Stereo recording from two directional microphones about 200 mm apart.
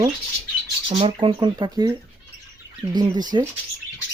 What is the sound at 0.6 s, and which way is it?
Bird, 25° right (ahead or behind).